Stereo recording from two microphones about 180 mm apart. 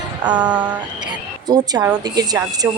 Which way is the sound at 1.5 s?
20° right (ahead or behind).